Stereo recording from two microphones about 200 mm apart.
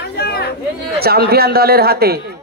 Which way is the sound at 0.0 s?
55° left (ahead or behind).